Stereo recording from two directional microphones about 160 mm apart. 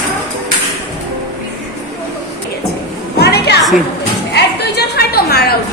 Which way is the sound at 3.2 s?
90° left.